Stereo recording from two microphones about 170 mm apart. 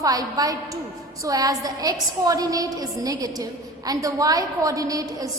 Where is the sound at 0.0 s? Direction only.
20° right (ahead or behind).